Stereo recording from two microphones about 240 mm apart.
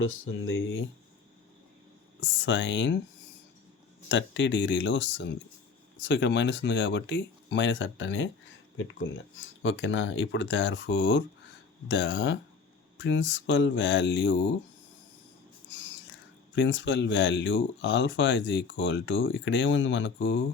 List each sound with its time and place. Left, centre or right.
0.0 s speech: left
2.2 s speech: left
4.1 s speech: left
9.4 s speech: left
16.6 s speech: left